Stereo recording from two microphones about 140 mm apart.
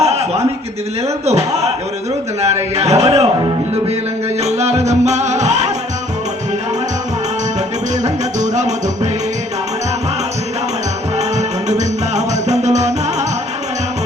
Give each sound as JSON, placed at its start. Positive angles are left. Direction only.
{"t": 0.0, "sound": "chuckle", "side_deg": -50}
{"t": 2.7, "sound": "music", "side_deg": -50}
{"t": 4.4, "sound": "music", "side_deg": -50}
{"t": 8.0, "sound": "music", "side_deg": -55}
{"t": 11.2, "sound": "music", "side_deg": -55}